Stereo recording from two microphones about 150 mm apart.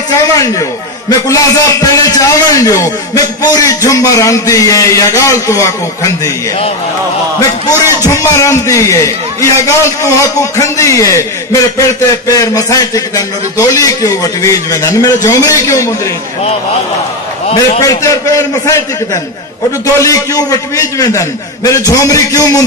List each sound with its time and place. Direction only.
0.1 s a man's voice: 25° left (ahead or behind)
7.3 s a man's voice: 25° left (ahead or behind)
17.6 s a man's voice: 25° left (ahead or behind)
20.0 s a man's voice: 20° left (ahead or behind)